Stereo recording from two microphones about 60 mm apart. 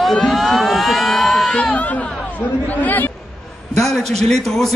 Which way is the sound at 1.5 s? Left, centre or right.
Centre.